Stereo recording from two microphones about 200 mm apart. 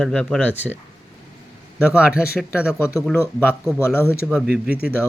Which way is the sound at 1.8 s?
5° right (ahead or behind).